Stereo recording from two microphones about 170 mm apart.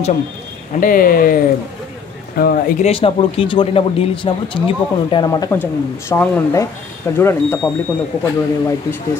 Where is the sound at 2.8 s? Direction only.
35° left (ahead or behind).